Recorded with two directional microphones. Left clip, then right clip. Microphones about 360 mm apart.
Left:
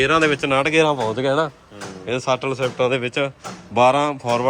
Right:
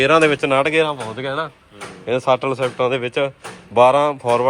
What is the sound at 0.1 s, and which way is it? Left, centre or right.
Speech, centre.